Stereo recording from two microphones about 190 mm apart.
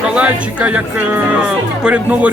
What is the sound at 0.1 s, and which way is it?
Speech, 5° right (ahead or behind).